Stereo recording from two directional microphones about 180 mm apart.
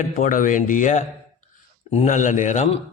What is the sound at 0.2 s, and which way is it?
A man's voice, 50° left (ahead or behind).